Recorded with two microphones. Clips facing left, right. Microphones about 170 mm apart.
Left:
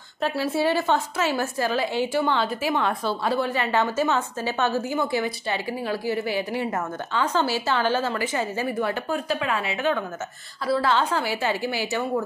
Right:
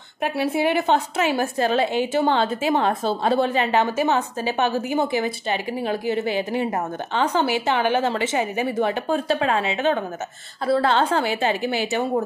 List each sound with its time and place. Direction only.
0.2 s a woman's voice: 15° right (ahead or behind)
2.7 s a woman's voice: 45° right (ahead or behind)
3.3 s a woman's voice: 25° right (ahead or behind)
10.7 s a woman's voice: 55° right (ahead or behind)
11.1 s a woman's voice: 20° right (ahead or behind)